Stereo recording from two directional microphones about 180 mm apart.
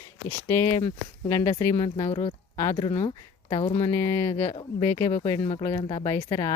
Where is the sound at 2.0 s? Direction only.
35° left (ahead or behind).